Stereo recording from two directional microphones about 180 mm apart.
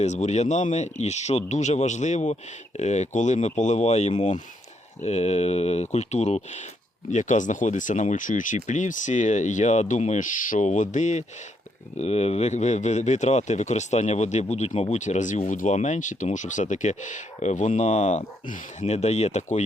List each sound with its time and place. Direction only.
0.0 s speech: 40° left (ahead or behind)